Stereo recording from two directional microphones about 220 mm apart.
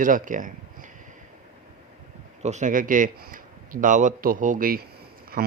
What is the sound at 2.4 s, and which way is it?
Speech, 30° right (ahead or behind).